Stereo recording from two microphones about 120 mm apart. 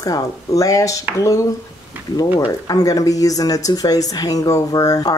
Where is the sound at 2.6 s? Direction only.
30° left (ahead or behind).